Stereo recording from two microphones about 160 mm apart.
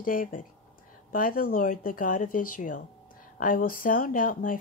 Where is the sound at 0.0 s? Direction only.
60° left (ahead or behind).